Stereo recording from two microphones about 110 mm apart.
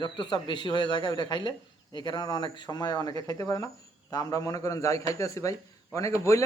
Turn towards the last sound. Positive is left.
turn(degrees=30)  # may be behind; listen again after turning